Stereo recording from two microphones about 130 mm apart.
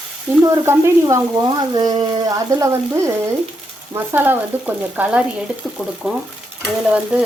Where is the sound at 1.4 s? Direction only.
35° right (ahead or behind).